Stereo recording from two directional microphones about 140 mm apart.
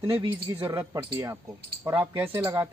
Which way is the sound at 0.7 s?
25° right (ahead or behind).